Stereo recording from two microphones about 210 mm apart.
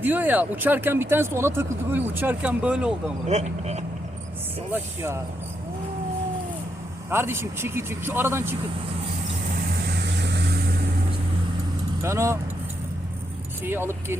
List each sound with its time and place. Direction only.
0.0 s speech: 10° right (ahead or behind)
3.2 s speech: 30° right (ahead or behind)
4.7 s speech: 10° right (ahead or behind)
7.1 s speech: 10° right (ahead or behind)
9.8 s vehicle: 55° right (ahead or behind)
12.0 s speech: 15° right (ahead or behind)
13.7 s speech: 10° right (ahead or behind)